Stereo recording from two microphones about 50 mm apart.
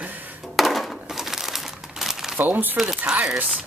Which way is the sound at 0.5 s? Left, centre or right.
Centre.